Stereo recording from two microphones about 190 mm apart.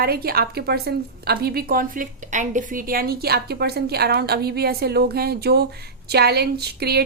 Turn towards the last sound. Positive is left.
turn(degrees=-60)  # may be behind; listen again after turning